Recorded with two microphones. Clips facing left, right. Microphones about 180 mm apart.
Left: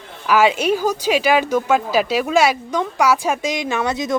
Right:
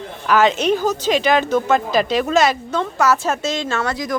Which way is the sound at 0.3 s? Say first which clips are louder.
Even; 10° left (ahead or behind).